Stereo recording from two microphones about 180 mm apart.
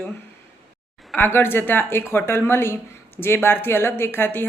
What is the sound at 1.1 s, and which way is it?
A woman's voice, 10° left (ahead or behind).